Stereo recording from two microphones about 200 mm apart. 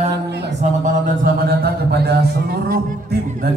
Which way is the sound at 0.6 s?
40° right (ahead or behind).